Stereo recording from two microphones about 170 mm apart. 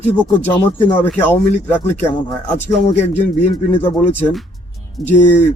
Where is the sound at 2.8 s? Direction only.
40° left (ahead or behind).